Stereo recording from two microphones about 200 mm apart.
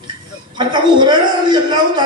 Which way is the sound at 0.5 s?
20° right (ahead or behind).